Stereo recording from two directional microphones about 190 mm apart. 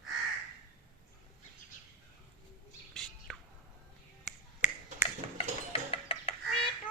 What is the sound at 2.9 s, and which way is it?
Bird, 5° left (ahead or behind).